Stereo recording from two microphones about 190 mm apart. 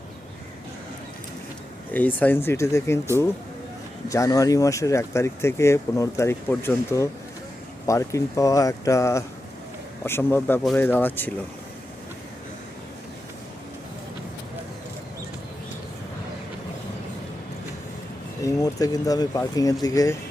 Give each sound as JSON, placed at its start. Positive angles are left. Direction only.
{"t": 1.9, "sound": "speech", "side_deg": 10}
{"t": 4.1, "sound": "speech", "side_deg": 15}
{"t": 18.4, "sound": "speech", "side_deg": 20}